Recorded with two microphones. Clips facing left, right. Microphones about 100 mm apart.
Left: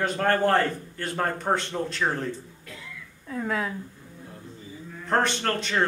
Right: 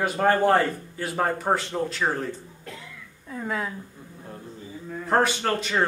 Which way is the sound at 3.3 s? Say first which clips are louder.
Left 1 dB; centre (ahead or behind).